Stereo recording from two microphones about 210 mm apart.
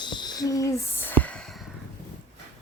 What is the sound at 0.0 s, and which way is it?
Music, 20° left (ahead or behind).